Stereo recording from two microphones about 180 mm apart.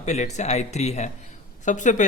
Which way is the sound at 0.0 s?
40° left (ahead or behind).